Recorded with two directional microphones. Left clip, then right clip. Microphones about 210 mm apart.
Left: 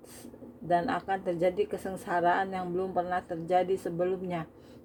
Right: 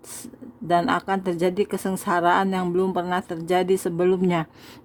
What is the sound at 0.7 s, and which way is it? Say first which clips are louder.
Speech: right 7 dB; 40° right (ahead or behind).